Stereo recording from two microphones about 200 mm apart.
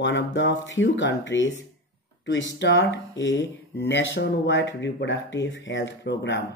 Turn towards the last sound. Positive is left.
turn(degrees=60)  # may be behind; listen again after turning